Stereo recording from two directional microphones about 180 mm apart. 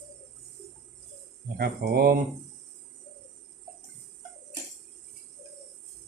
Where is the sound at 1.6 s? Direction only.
60° right (ahead or behind).